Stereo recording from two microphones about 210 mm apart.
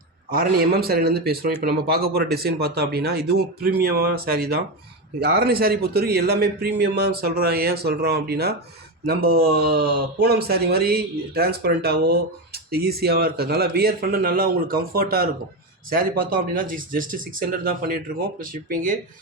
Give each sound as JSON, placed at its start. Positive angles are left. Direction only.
{"t": 0.3, "sound": "speech", "side_deg": -45}